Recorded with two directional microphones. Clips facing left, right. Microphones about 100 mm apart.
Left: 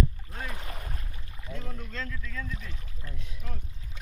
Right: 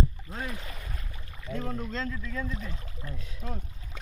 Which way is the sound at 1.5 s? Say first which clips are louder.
Right 7 dB; 45° right (ahead or behind).